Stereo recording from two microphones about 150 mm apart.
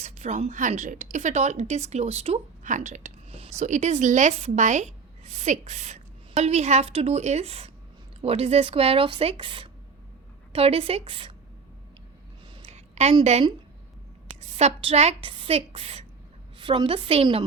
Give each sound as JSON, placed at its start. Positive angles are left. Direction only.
{"t": 0.0, "sound": "a woman's voice", "side_deg": -50}
{"t": 12.5, "sound": "a sound", "side_deg": -45}
{"t": 14.5, "sound": "speech", "side_deg": -40}